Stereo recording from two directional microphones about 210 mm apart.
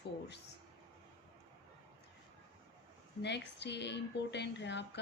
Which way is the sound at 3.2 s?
55° left (ahead or behind).